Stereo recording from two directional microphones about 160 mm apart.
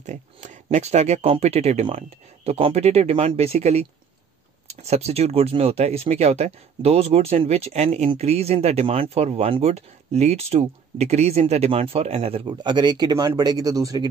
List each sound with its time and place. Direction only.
0.0 s speech: 50° right (ahead or behind); by 14.0 s 20° right (ahead or behind)